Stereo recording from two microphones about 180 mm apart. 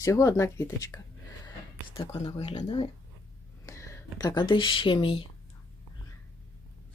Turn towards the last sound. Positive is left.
turn(degrees=30)  # may be behind; listen again after turning